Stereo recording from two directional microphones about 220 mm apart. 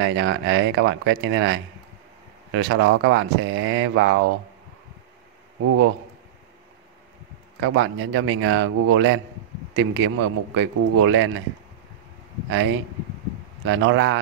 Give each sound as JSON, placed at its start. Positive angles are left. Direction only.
{"t": 0.0, "sound": "speech", "side_deg": -55}
{"t": 7.6, "sound": "speech", "side_deg": -60}
{"t": 12.4, "sound": "speech", "side_deg": -60}